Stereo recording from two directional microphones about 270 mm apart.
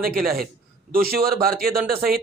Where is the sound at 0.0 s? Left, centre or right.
Right.